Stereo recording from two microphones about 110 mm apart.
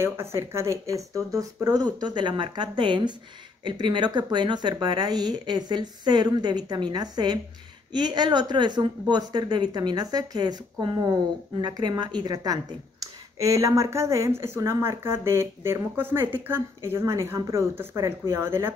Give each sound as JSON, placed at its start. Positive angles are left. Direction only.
{"t": 0.0, "sound": "a woman's voice", "side_deg": -25}